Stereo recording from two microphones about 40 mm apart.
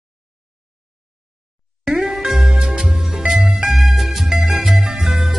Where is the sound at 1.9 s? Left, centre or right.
Centre.